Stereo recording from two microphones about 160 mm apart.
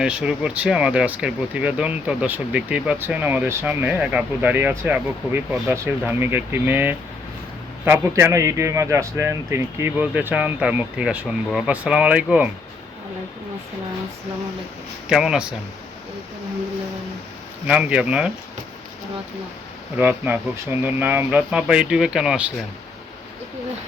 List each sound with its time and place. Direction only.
0.0 s speech: 5° right (ahead or behind)
15.1 s speech: 5° right (ahead or behind)
17.7 s speech: 5° right (ahead or behind)
20.0 s speech: 10° right (ahead or behind)